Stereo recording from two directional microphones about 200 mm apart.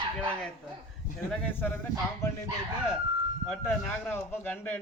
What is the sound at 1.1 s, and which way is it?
Speech, 5° left (ahead or behind).